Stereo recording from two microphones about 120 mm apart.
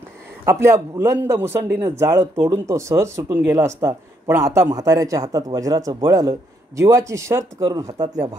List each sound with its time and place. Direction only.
0.5 s speech: 20° right (ahead or behind)